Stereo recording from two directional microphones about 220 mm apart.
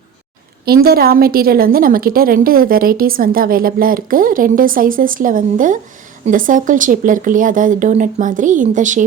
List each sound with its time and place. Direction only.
0.6 s a woman's voice: 45° right (ahead or behind)